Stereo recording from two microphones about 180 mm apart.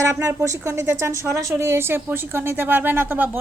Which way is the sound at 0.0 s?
15° right (ahead or behind).